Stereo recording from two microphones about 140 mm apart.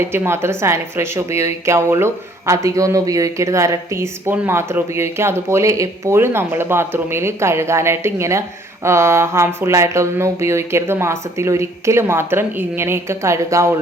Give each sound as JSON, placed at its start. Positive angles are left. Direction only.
{"t": 0.0, "sound": "speech", "side_deg": -15}